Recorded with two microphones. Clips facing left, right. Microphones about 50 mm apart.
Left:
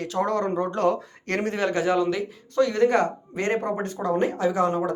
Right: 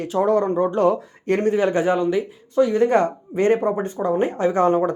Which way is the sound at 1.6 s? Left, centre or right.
Right.